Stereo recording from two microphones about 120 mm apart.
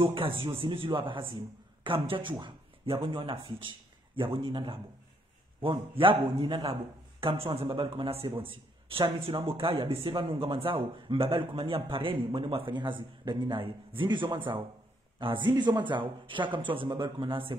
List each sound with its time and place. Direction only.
0.0 s a man's voice: 45° right (ahead or behind)